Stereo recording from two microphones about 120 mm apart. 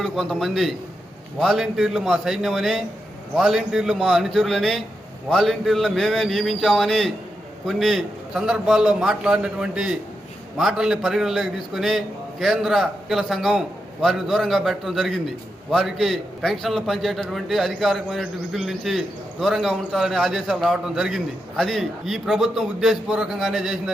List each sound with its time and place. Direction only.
0.0 s a man's voice: 5° left (ahead or behind)